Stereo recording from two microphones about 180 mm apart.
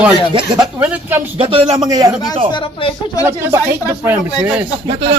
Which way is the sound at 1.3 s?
30° right (ahead or behind).